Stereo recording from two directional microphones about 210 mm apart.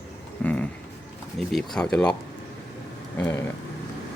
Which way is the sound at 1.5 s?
Centre (ahead or behind).